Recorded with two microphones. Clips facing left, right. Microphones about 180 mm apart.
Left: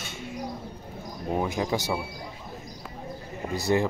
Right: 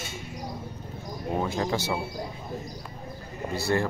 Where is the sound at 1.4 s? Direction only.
15° left (ahead or behind).